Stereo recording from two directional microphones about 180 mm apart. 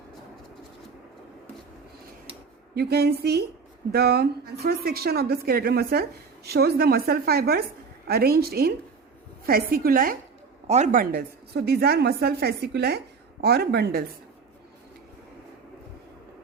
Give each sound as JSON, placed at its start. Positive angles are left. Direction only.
{"t": 2.7, "sound": "speech", "side_deg": -60}
{"t": 10.7, "sound": "speech", "side_deg": -40}